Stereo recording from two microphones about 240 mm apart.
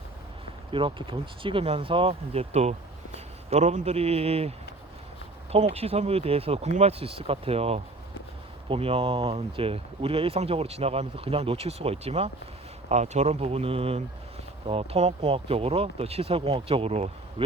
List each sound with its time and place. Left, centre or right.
0.7 s speech: right